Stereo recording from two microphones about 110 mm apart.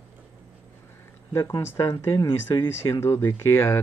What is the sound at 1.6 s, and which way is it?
Speech, 25° left (ahead or behind).